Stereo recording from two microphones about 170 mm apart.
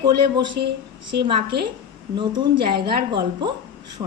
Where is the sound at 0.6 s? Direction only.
65° right (ahead or behind).